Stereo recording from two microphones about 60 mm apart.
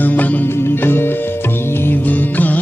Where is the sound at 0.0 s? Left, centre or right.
Left.